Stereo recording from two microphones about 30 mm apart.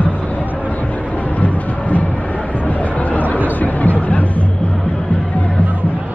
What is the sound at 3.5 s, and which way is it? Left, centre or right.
Chatter, left.